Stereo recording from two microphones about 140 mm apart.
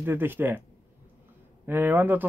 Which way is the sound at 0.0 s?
15° right (ahead or behind).